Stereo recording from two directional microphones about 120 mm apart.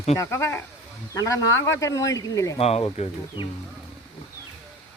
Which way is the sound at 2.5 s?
60° left (ahead or behind).